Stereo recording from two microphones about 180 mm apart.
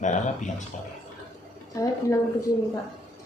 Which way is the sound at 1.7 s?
20° left (ahead or behind).